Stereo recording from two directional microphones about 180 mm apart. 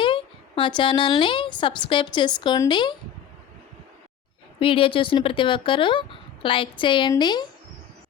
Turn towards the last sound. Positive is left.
turn(degrees=25)  # may be behind; listen again after turning